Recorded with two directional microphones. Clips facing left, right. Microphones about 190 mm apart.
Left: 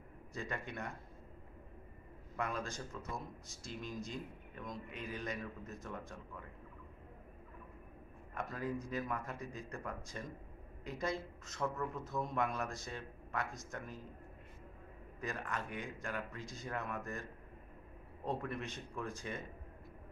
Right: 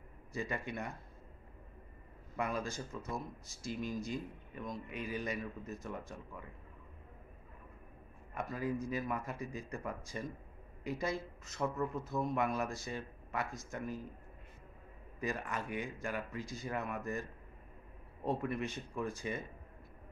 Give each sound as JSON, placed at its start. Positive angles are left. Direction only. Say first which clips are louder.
{"t": 0.3, "sound": "speech", "louder": "right 4 dB", "side_deg": -5}
{"t": 2.3, "sound": "speech", "louder": "right 3 dB", "side_deg": -5}
{"t": 8.4, "sound": "a woman's voice", "louder": "right 3 dB", "side_deg": -5}
{"t": 15.1, "sound": "speech", "louder": "right 3 dB", "side_deg": -5}
{"t": 18.2, "sound": "speech", "louder": "right 4 dB", "side_deg": -5}